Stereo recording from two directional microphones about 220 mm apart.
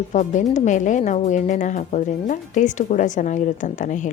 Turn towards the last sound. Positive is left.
turn(degrees=35)  # may be behind; listen again after turning